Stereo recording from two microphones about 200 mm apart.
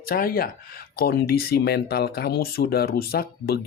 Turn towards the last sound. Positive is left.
turn(degrees=50)  # may be behind; listen again after turning